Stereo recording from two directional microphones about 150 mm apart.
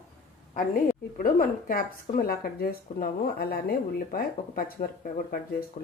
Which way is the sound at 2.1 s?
80° left.